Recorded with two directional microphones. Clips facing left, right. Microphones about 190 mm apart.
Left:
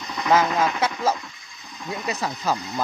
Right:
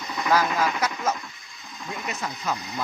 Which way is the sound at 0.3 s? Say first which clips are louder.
Left 3 dB; 25° left (ahead or behind).